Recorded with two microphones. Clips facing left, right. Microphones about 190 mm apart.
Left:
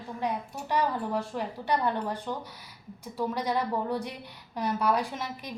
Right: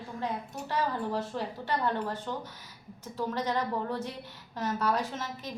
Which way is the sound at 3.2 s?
10° left (ahead or behind).